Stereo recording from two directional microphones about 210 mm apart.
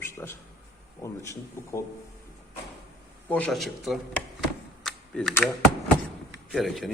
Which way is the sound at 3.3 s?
5° left (ahead or behind).